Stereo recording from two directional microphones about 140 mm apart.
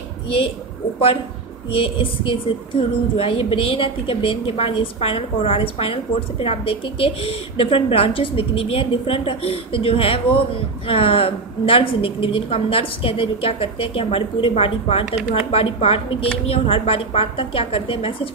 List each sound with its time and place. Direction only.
1.7 s a woman's voice: 40° left (ahead or behind)